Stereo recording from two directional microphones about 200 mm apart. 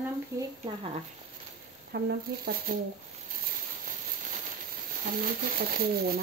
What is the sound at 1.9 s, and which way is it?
Speech, 55° right (ahead or behind).